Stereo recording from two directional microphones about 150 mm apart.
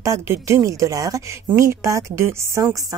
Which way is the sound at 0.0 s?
20° right (ahead or behind).